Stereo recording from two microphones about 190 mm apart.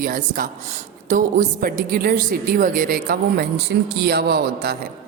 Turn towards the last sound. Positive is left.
turn(degrees=-55)  # may be behind; listen again after turning